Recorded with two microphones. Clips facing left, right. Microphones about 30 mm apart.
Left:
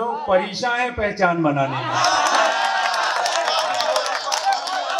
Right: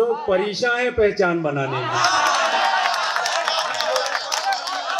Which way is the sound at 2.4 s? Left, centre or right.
Centre.